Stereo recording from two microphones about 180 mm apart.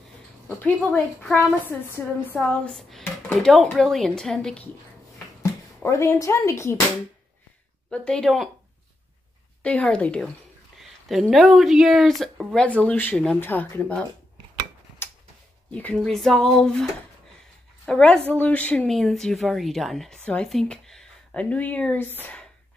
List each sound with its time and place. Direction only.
0.8 s speech: 5° left (ahead or behind)
5.9 s speech: 15° left (ahead or behind)
7.9 s speech: 5° left (ahead or behind)
9.6 s speech: 5° left (ahead or behind)
15.7 s speech: 5° left (ahead or behind)
17.8 s speech: 5° left (ahead or behind)
22.2 s a sound: 5° left (ahead or behind)